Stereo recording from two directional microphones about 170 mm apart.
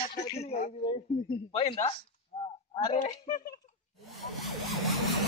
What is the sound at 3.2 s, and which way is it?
Speech, 65° left (ahead or behind).